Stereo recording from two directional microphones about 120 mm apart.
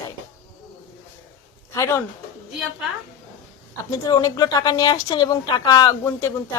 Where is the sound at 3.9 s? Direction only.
30° left (ahead or behind).